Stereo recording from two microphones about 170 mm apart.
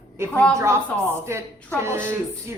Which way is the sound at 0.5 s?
15° right (ahead or behind).